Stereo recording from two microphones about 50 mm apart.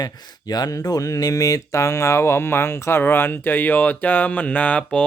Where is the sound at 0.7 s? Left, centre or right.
Left.